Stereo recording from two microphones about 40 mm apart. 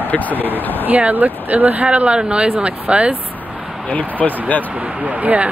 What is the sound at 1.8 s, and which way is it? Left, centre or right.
Speech, right.